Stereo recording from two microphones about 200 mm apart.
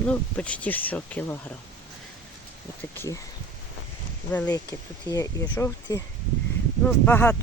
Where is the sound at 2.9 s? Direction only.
10° left (ahead or behind).